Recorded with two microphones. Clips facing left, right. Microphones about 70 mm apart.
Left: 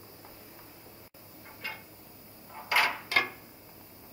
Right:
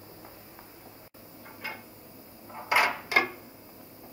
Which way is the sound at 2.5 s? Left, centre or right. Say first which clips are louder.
Right 3 dB; centre.